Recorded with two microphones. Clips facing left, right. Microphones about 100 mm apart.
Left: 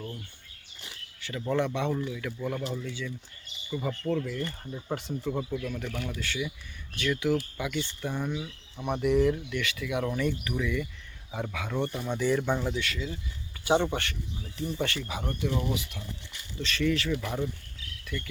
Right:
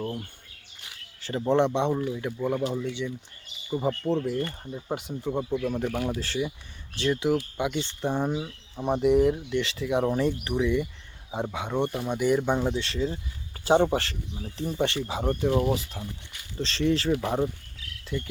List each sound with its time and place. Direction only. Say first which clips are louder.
0.0 s speech: right 7 dB; 50° right (ahead or behind)
1.2 s speech: right 6 dB; 30° right (ahead or behind)
4.6 s speech: right 2 dB; 20° right (ahead or behind)
5.6 s speech: right 7 dB; 35° right (ahead or behind)
12.0 s speech: right 2 dB; 15° right (ahead or behind)
12.5 s speech: right 4 dB; 25° right (ahead or behind)
18.0 s cricket: right 5 dB; 25° right (ahead or behind)